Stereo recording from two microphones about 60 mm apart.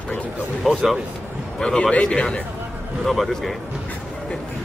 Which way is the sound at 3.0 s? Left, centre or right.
Centre.